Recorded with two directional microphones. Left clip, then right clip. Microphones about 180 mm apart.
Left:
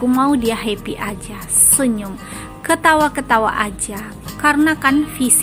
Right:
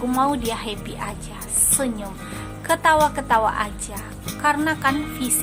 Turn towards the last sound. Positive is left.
turn(degrees=15)  # may be behind; listen again after turning